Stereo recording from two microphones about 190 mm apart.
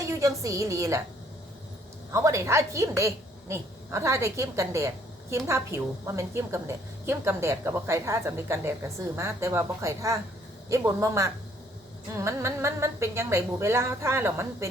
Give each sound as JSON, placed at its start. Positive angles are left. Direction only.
{"t": 0.0, "sound": "a woman's voice", "side_deg": -15}
{"t": 2.1, "sound": "a woman's voice", "side_deg": -15}